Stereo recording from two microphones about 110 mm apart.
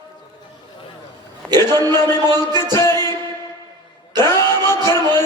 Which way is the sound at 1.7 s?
40° right (ahead or behind).